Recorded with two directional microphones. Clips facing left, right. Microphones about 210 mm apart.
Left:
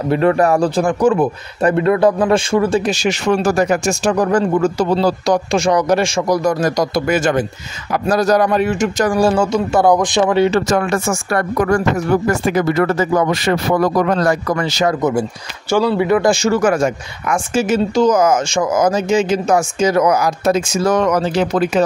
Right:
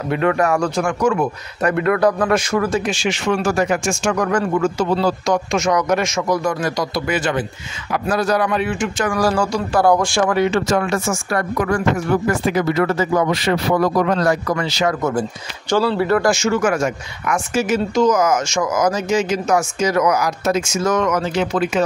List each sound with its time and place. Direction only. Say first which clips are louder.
0.1 s speech: left 4 dB; 35° left (ahead or behind)
9.2 s speech: left 3 dB; 25° left (ahead or behind)
10.4 s speech: left 3 dB; 40° left (ahead or behind)
15.7 s speech: left 2 dB; 15° left (ahead or behind)
16.3 s speech: left 3 dB; 35° left (ahead or behind)